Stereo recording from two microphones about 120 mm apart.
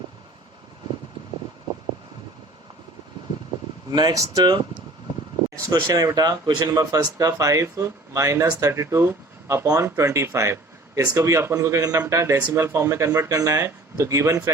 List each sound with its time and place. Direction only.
3.9 s speech: 30° right (ahead or behind)
5.6 s speech: 25° right (ahead or behind)